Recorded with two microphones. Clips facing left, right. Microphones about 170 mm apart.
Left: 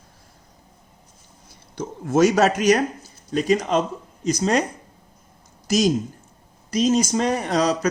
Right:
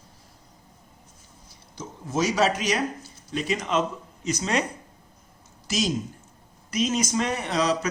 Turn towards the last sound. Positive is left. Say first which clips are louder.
# left 4 dB
turn(degrees=40)  # may be behind; listen again after turning